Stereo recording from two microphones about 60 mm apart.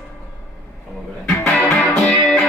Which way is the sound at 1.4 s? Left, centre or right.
Centre.